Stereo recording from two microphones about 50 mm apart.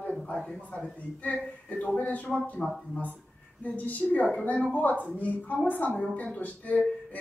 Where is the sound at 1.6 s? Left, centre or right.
Left.